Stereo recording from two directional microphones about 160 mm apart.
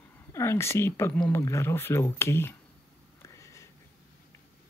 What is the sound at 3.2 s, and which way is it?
Sniff, 20° left (ahead or behind).